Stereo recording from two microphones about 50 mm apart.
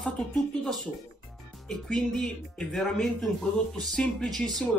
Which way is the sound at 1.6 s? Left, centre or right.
Centre.